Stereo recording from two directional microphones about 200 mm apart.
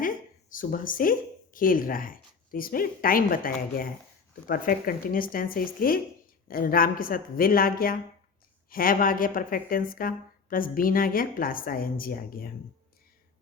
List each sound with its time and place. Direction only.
0.5 s speech: 45° left (ahead or behind)